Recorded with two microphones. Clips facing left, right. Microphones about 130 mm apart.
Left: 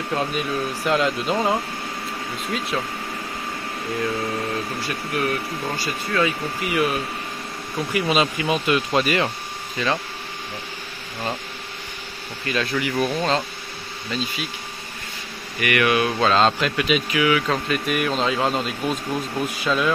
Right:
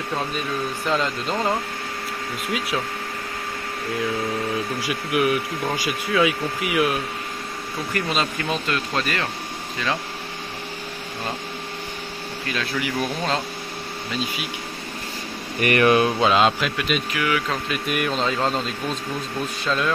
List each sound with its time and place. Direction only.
0.8 s speech: 5° left (ahead or behind)
4.8 s speech: 10° right (ahead or behind); by 9.2 s 15° left (ahead or behind)
12.4 s speech: centre (ahead or behind)
15.6 s speech: 35° right (ahead or behind)
16.2 s speech: 10° right (ahead or behind); by 19.9 s 5° left (ahead or behind)